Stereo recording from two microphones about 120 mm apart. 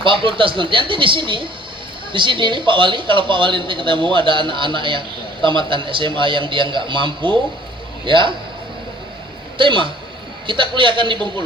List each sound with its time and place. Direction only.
0.0 s a man's voice: 45° right (ahead or behind)
9.6 s a man's voice: 45° right (ahead or behind)